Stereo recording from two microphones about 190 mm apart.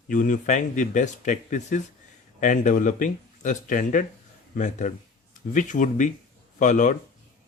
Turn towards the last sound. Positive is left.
turn(degrees=40)  # may be behind; listen again after turning